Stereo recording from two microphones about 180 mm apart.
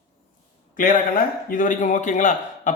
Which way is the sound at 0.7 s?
50° left (ahead or behind).